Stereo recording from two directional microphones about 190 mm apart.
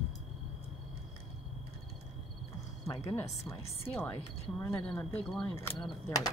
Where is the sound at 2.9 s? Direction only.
15° left (ahead or behind).